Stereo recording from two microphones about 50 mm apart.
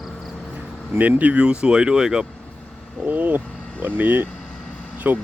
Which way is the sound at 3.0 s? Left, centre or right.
Right.